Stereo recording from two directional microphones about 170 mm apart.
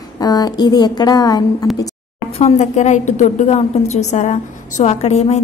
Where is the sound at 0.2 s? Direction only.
25° left (ahead or behind).